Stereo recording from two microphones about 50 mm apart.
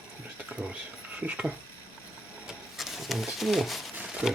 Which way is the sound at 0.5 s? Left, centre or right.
Centre.